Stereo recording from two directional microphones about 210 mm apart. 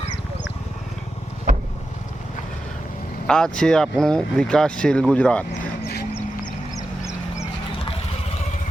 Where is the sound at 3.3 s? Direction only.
5° left (ahead or behind).